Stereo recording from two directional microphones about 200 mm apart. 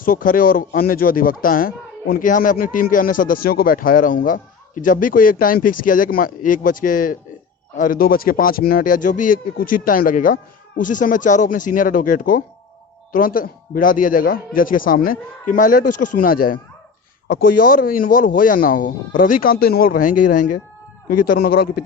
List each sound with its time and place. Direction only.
0.0 s speech: 45° left (ahead or behind)